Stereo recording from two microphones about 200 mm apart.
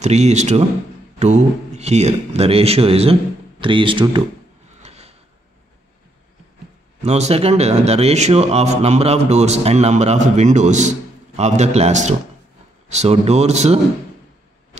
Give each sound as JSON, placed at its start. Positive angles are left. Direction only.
{"t": 0.0, "sound": "speech", "side_deg": -35}
{"t": 4.8, "sound": "a sound", "side_deg": -30}
{"t": 7.0, "sound": "speech", "side_deg": -35}